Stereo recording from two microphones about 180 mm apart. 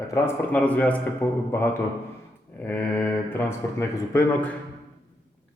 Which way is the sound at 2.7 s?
10° left (ahead or behind).